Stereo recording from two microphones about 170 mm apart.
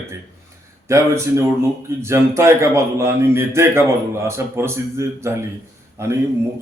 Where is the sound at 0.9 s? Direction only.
15° right (ahead or behind).